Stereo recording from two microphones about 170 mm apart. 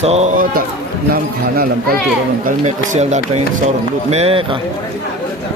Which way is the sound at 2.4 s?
45° right (ahead or behind).